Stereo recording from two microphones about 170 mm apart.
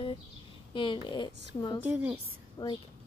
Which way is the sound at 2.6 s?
20° left (ahead or behind).